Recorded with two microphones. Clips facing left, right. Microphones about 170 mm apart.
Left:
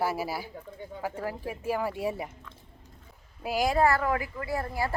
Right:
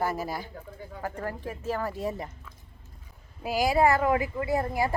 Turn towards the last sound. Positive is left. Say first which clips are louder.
# right 4 dB
turn(degrees=-15)  # may be behind; listen again after turning